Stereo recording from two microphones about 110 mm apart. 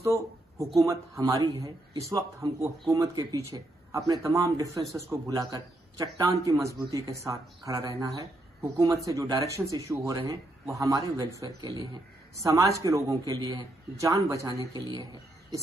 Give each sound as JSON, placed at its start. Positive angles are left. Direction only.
{"t": 0.0, "sound": "speech", "side_deg": -30}